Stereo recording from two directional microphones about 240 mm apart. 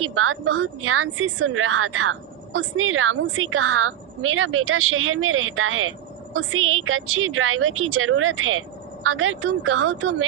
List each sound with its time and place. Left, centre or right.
0.0 s a woman's voice: right